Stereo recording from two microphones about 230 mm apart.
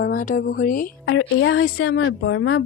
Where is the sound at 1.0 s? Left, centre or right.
Left.